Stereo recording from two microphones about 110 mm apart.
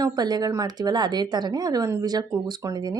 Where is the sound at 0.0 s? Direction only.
35° right (ahead or behind).